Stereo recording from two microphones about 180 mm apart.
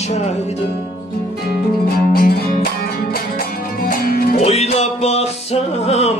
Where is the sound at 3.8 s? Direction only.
55° left (ahead or behind).